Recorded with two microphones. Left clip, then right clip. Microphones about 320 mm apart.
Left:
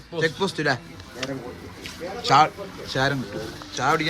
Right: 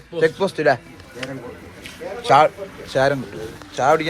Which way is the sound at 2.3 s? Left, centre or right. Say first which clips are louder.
Right 4 dB; centre.